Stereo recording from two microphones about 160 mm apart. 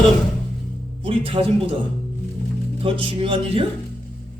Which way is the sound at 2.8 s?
35° right (ahead or behind).